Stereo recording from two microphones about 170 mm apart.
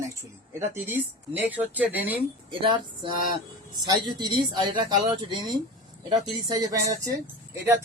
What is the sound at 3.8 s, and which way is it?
Speech, 25° right (ahead or behind).